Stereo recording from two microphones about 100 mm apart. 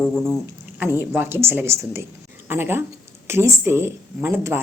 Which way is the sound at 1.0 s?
20° right (ahead or behind).